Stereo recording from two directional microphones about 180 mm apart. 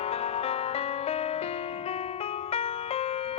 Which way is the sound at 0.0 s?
35° left (ahead or behind).